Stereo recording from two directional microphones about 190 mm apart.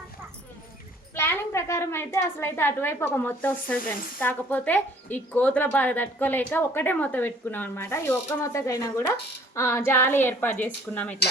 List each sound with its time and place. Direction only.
1.1 s a woman's voice: 10° left (ahead or behind)